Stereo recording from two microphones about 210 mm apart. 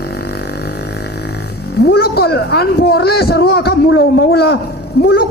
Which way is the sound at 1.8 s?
50° left (ahead or behind).